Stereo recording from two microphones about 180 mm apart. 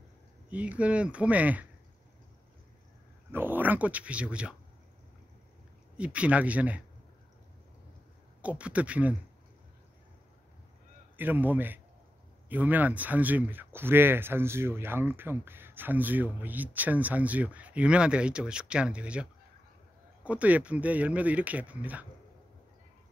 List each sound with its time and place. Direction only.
0.5 s speech: 10° right (ahead or behind)
3.3 s speech: 10° right (ahead or behind)
5.9 s speech: 5° right (ahead or behind)
8.4 s speech: 5° right (ahead or behind)
11.1 s speech: 10° right (ahead or behind)
20.2 s speech: 10° right (ahead or behind)